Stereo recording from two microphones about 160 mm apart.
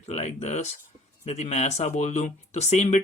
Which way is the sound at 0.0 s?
45° left (ahead or behind).